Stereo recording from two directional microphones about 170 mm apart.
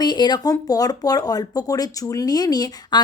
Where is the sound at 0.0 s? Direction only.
25° left (ahead or behind).